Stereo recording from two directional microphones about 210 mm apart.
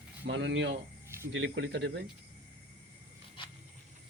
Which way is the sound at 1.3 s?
60° right (ahead or behind).